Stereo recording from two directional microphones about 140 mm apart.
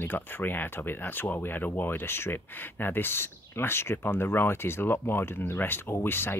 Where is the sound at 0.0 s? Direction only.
15° left (ahead or behind).